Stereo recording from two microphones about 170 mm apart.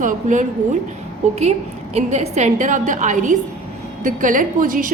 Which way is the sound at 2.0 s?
40° right (ahead or behind).